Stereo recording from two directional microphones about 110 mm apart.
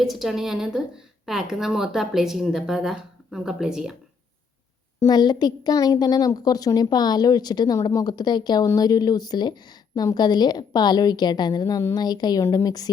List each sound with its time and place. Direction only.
0.0 s a woman's voice: centre (ahead or behind)
5.0 s a woman's voice: 40° left (ahead or behind)